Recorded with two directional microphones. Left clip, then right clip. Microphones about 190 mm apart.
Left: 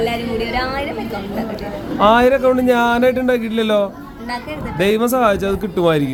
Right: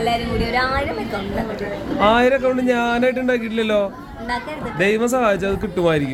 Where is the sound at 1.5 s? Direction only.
15° left (ahead or behind).